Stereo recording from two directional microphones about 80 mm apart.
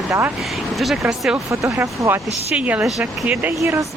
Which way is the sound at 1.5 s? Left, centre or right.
Right.